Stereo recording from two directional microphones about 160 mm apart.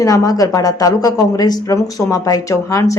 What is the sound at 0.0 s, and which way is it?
A woman's voice, 20° left (ahead or behind).